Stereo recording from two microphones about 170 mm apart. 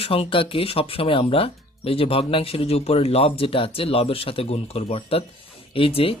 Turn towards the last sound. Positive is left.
turn(degrees=35)  # may be behind; listen again after turning